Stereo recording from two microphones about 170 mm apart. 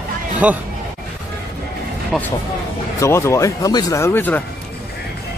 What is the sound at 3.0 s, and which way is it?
Speech, 15° left (ahead or behind).